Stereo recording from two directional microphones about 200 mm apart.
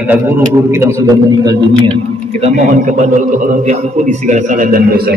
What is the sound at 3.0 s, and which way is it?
A man's voice, 35° right (ahead or behind).